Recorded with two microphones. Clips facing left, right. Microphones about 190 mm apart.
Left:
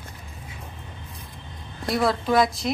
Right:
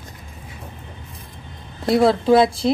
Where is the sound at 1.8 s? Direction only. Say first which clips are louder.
Right 8 dB; 25° right (ahead or behind).